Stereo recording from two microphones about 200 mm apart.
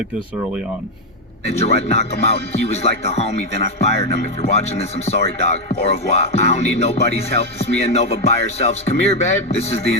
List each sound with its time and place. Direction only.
1.5 s speech: 30° left (ahead or behind)